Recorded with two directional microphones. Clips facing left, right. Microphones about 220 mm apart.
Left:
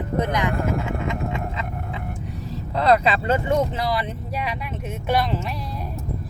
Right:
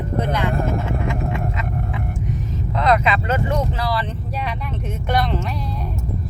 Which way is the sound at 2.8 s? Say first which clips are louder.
Even; 35° left (ahead or behind).